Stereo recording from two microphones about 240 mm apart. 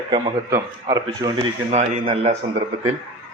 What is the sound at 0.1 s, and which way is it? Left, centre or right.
A man's voice, centre.